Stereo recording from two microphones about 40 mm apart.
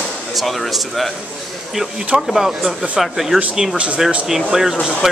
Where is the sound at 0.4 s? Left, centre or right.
Centre.